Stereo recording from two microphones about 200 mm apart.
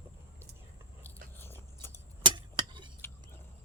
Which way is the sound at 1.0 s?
10° left (ahead or behind).